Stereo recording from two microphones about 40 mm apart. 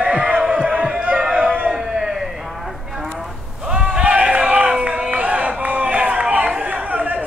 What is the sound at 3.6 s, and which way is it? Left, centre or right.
Sheep, right.